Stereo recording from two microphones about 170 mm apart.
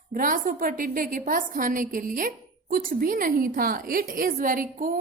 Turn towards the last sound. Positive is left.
turn(degrees=-55)  # may be behind; listen again after turning